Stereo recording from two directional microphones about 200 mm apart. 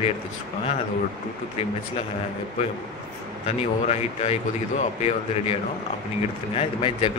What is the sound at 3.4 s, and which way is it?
A man's voice, 30° left (ahead or behind).